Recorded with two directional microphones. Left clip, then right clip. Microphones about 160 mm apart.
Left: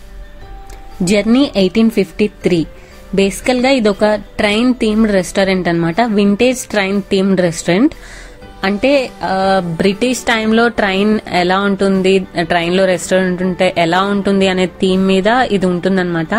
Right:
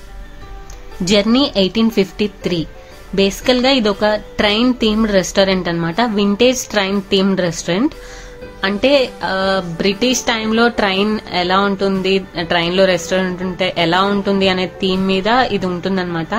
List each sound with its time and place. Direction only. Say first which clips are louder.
1.0 s a woman's voice: left 1 dB; 20° left (ahead or behind)
9.8 s a woman's voice: left 1 dB; 40° left (ahead or behind)